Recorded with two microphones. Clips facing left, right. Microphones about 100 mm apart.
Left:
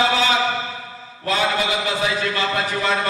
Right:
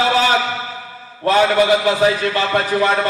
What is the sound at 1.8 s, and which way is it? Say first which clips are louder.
Speech: right 7 dB; 45° right (ahead or behind).